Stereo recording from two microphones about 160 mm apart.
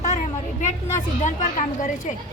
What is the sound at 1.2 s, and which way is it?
Speech, 50° left (ahead or behind).